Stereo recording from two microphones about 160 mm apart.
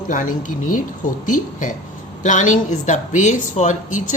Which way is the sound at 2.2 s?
50° left (ahead or behind).